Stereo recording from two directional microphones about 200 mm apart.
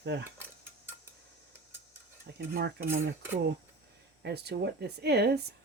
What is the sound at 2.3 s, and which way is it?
Cutlery, 55° right (ahead or behind).